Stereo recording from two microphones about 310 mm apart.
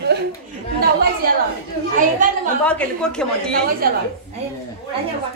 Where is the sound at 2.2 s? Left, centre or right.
Right.